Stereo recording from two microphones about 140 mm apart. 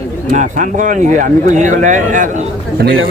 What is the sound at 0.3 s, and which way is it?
Speech, 70° right (ahead or behind).